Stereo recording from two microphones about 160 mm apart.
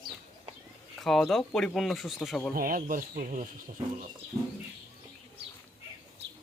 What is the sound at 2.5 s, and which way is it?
Speech, 60° right (ahead or behind).